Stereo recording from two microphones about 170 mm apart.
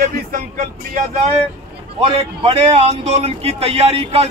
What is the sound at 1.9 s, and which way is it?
A man's voice, 35° right (ahead or behind).